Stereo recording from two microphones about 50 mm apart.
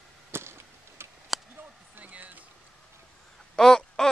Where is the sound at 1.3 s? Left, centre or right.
Centre.